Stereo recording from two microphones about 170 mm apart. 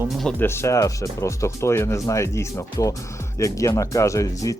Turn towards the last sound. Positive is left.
turn(degrees=20)  # may be behind; listen again after turning